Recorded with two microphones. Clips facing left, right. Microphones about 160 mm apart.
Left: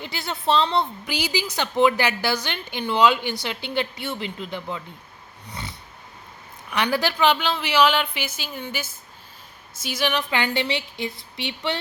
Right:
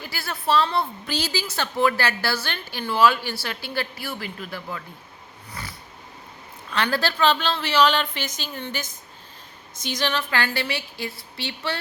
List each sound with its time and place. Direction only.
0.0 s a woman's voice: 20° left (ahead or behind)
6.7 s a woman's voice: 15° left (ahead or behind)